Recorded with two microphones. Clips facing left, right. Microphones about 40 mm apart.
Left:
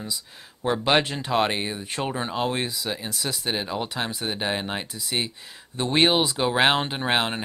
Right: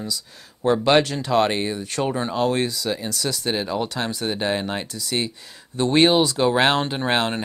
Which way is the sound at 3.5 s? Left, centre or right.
Centre.